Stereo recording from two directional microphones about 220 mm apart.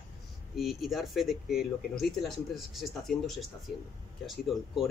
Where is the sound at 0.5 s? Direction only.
Centre (ahead or behind).